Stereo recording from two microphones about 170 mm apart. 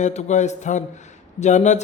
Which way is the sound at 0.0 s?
45° left (ahead or behind).